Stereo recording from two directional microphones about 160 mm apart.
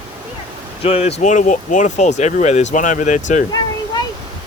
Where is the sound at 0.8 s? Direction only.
40° left (ahead or behind).